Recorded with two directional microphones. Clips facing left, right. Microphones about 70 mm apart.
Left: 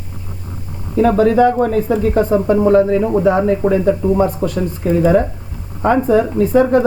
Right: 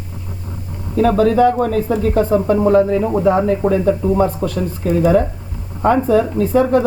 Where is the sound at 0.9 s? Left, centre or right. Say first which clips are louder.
Left 1 dB; centre.